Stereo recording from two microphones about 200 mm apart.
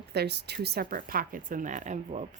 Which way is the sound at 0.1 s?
55° right (ahead or behind).